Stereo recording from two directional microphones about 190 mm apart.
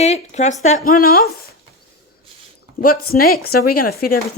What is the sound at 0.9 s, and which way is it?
Speech, 50° left (ahead or behind).